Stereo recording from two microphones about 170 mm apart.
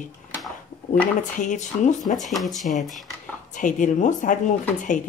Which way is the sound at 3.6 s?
50° left (ahead or behind).